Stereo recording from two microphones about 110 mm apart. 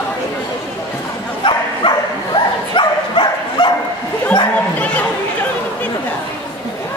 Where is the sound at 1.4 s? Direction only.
45° left (ahead or behind).